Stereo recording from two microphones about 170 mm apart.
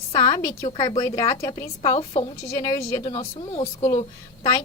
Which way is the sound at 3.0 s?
35° left (ahead or behind).